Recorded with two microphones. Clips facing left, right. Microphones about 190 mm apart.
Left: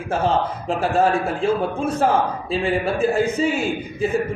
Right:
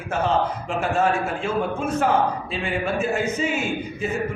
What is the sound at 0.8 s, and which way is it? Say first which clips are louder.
A man's voice: left 3 dB; 35° left (ahead or behind).